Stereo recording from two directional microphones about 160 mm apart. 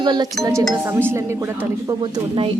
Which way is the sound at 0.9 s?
15° right (ahead or behind).